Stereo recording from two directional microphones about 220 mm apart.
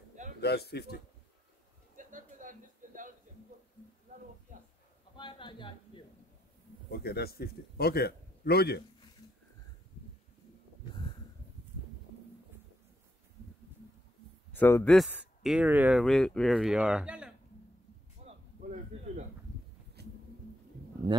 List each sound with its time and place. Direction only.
0.4 s a man's voice: 45° left (ahead or behind)
2.0 s a sound: 35° right (ahead or behind)
4.5 s speech: 35° right (ahead or behind)
5.1 s speech: 20° left (ahead or behind)
6.9 s a man's voice: 45° left (ahead or behind)
14.5 s a man's voice: 10° left (ahead or behind)
15.0 s speech: 5° right (ahead or behind)
20.0 s a sound: 50° right (ahead or behind)